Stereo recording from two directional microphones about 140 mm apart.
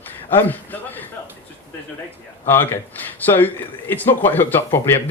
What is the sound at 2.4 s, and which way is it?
Speech, 15° left (ahead or behind).